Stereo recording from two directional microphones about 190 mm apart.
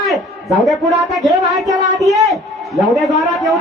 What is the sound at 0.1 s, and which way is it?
A man's voice, centre (ahead or behind).